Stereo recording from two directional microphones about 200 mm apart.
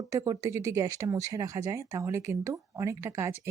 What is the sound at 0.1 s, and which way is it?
Speech, 15° right (ahead or behind).